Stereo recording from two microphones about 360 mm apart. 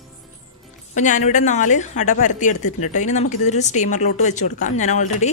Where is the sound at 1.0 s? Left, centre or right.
Centre.